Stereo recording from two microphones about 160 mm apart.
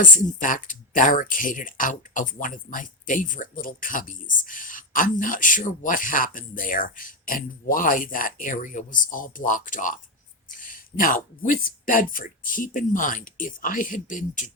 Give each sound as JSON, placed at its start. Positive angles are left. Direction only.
{"t": 0.0, "sound": "speech", "side_deg": 55}